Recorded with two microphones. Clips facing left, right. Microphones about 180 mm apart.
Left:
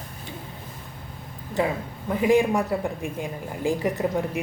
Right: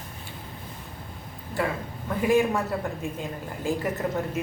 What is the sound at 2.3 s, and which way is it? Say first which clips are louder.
A woman's voice: left 2 dB; 15° left (ahead or behind).